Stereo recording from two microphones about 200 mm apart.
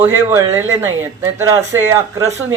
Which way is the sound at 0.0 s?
15° right (ahead or behind).